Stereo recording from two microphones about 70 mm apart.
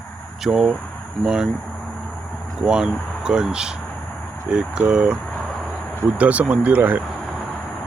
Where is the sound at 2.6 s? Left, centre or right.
Centre.